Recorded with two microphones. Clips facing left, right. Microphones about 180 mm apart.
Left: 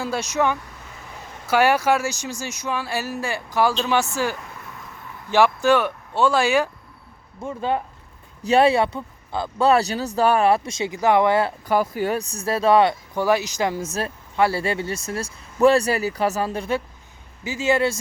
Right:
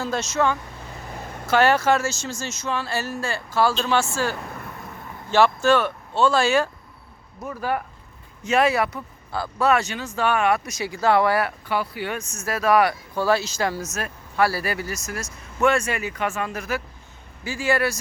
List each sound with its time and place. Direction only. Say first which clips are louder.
0.0 s speech: even; 10° left (ahead or behind)
11.6 s speech: left 5 dB; 45° left (ahead or behind); by 13.8 s 20° left (ahead or behind)
13.8 s speech: left 4 dB; 30° left (ahead or behind)